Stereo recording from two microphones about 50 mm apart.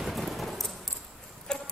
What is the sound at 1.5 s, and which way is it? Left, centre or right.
Music, centre.